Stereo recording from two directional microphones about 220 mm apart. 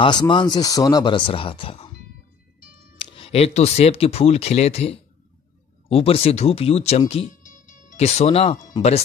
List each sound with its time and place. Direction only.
0.0 s speech: 20° left (ahead or behind)
3.0 s speech: 25° left (ahead or behind)